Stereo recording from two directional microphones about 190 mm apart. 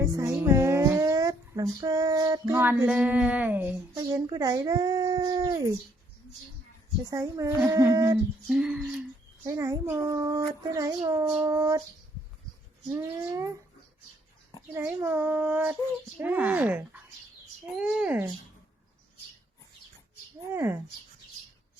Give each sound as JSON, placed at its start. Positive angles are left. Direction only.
{"t": 0.0, "sound": "speech", "side_deg": -15}
{"t": 3.9, "sound": "speech", "side_deg": -20}
{"t": 7.1, "sound": "a child's voice", "side_deg": -15}
{"t": 8.4, "sound": "speech", "side_deg": -5}
{"t": 9.5, "sound": "a child's voice", "side_deg": -15}
{"t": 12.9, "sound": "a child's voice", "side_deg": -15}
{"t": 14.7, "sound": "a child's voice", "side_deg": -10}
{"t": 20.5, "sound": "a child's voice", "side_deg": -15}